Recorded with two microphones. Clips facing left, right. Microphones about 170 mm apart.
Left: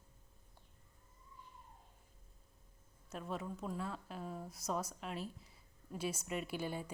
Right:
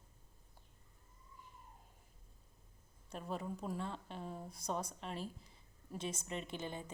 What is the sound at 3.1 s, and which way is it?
A woman's voice, centre (ahead or behind).